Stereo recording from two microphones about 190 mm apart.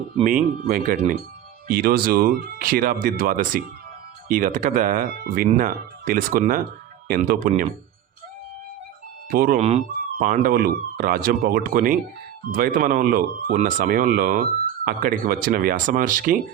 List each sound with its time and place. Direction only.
0.3 s speech: 45° right (ahead or behind)
9.3 s speech: 50° right (ahead or behind)
9.6 s speech: 35° right (ahead or behind)